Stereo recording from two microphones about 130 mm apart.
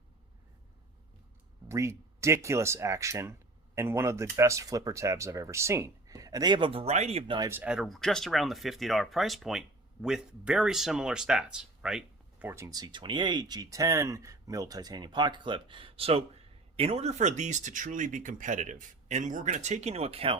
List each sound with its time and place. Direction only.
1.6 s speech: 20° right (ahead or behind); by 7.3 s 55° right (ahead or behind)
7.5 s speech: 10° right (ahead or behind)
12.5 s speech: 20° right (ahead or behind); by 20.4 s 45° right (ahead or behind)